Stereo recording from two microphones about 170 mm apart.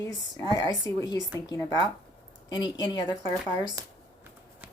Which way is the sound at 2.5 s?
25° left (ahead or behind).